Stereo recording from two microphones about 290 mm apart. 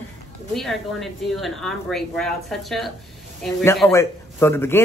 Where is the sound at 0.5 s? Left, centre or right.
Centre.